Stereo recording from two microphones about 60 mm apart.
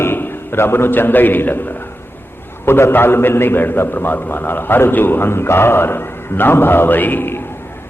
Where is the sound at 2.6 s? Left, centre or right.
Left.